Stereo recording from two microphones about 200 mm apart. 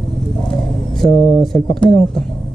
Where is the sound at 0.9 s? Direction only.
Centre (ahead or behind).